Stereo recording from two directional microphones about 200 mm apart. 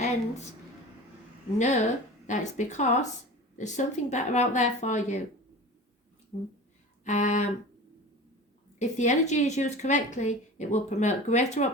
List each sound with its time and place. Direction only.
0.0 s speech: 35° left (ahead or behind)
1.5 s a woman's voice: 35° left (ahead or behind)
7.0 s a sound: 35° left (ahead or behind)
8.8 s a woman's voice: 35° left (ahead or behind)